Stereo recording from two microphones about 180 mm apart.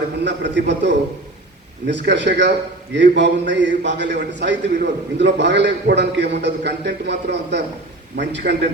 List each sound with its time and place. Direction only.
0.3 s a man's voice: 75° right (ahead or behind)